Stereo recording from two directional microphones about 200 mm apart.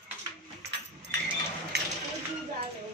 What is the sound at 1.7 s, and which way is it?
Music, 55° right (ahead or behind).